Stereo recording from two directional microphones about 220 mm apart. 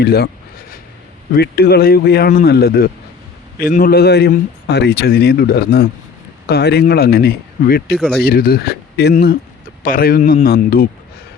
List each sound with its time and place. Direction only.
0.0 s a man's voice: 45° left (ahead or behind)
1.3 s a man's voice: 45° left (ahead or behind)
7.9 s speech: centre (ahead or behind)
8.2 s a man's voice: 45° left (ahead or behind)